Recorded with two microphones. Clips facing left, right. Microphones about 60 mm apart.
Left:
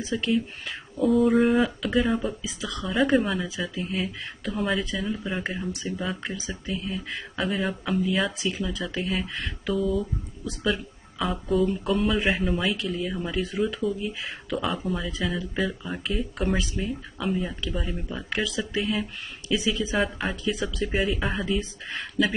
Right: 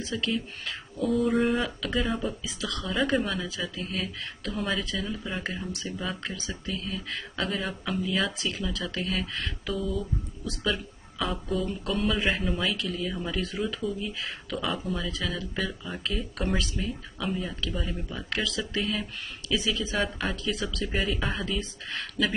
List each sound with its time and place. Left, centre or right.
0.0 s speech: centre
1.1 s speech: centre
2.4 s speech: centre
2.9 s speech: centre
15.0 s speech: centre
20.0 s speech: centre